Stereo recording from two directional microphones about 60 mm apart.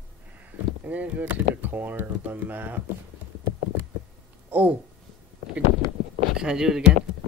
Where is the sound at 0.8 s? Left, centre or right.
Right.